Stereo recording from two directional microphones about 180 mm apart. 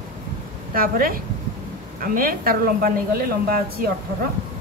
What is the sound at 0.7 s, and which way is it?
Speech, 55° right (ahead or behind).